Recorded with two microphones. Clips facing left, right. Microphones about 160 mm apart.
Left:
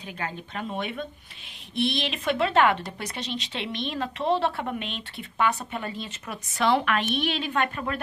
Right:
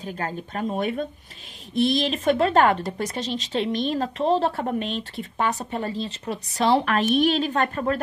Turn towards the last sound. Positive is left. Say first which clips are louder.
# right 4 dB
turn(degrees=-40)  # may be behind; listen again after turning